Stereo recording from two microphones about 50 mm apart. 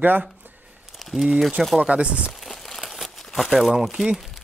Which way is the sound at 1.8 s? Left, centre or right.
Right.